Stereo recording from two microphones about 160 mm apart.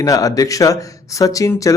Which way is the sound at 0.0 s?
20° left (ahead or behind).